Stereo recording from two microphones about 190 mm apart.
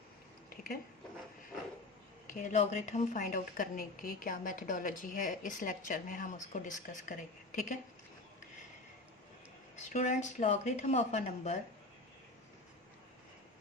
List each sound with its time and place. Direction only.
0.5 s a sound: 50° left (ahead or behind)
2.3 s a woman's voice: 40° left (ahead or behind)
9.7 s a woman's voice: 40° left (ahead or behind)